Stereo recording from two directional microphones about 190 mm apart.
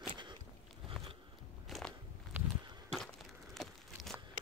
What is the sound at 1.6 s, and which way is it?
Biting, centre (ahead or behind).